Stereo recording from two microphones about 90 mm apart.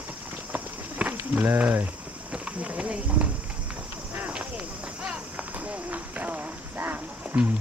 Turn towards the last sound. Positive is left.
turn(degrees=-20)  # may be behind; listen again after turning